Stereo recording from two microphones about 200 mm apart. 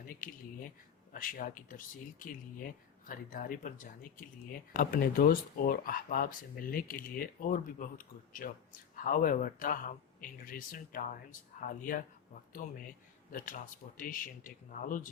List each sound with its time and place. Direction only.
1.1 s speech: 45° left (ahead or behind)